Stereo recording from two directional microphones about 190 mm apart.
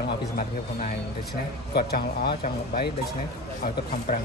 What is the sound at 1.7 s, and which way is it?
A man's voice, 55° left (ahead or behind).